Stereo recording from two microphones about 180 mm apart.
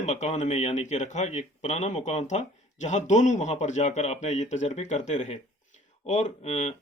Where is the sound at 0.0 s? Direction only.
40° left (ahead or behind).